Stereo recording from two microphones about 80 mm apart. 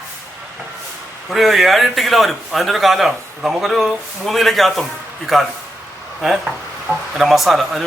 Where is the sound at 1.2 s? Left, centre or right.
Centre.